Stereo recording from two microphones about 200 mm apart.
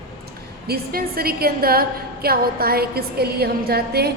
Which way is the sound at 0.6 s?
50° right (ahead or behind).